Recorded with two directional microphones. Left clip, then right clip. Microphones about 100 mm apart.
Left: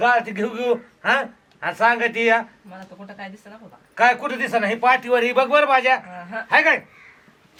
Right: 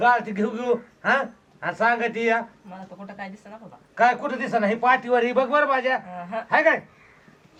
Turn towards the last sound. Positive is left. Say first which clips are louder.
# left 3 dB
turn(degrees=20)  # may be behind; listen again after turning